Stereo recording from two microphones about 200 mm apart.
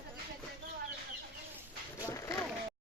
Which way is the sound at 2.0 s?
15° left (ahead or behind).